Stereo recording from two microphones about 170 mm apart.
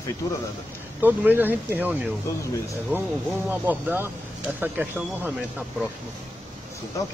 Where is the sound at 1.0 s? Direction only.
10° right (ahead or behind).